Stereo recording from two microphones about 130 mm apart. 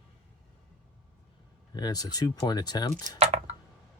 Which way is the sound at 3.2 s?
60° right (ahead or behind).